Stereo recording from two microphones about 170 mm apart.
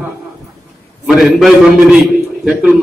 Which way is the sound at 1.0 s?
Centre (ahead or behind).